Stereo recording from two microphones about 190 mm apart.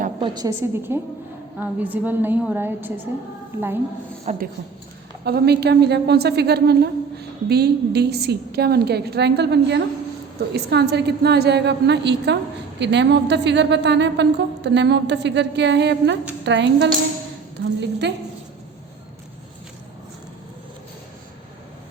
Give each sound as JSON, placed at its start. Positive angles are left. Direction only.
{"t": 0.2, "sound": "a woman's voice", "side_deg": -20}
{"t": 4.3, "sound": "speech", "side_deg": -35}
{"t": 5.2, "sound": "a woman's voice", "side_deg": -60}